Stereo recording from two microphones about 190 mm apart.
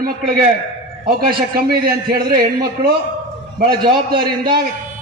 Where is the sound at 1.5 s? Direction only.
50° right (ahead or behind).